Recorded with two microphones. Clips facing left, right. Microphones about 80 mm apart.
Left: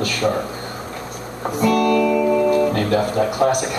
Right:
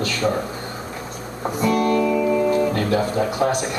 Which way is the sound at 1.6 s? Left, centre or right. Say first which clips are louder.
Left 3 dB; left.